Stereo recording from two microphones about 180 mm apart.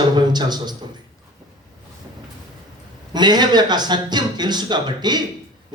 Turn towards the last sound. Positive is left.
turn(degrees=-25)  # may be behind; listen again after turning